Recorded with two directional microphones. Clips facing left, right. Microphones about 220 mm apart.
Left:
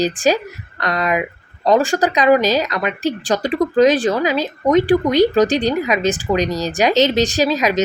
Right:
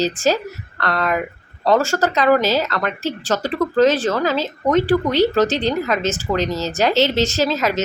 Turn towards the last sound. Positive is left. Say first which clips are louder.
# left 2 dB
turn(degrees=15)  # may be behind; listen again after turning